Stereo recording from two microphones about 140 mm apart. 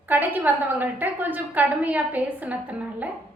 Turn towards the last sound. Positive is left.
turn(degrees=-10)  # may be behind; listen again after turning